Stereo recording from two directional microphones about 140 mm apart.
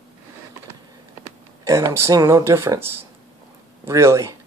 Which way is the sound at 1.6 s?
20° right (ahead or behind).